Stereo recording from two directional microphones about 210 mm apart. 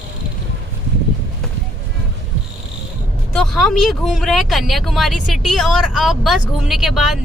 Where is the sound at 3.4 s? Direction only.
Centre (ahead or behind).